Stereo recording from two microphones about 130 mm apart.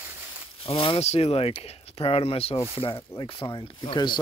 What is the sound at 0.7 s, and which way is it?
Speech, 45° left (ahead or behind).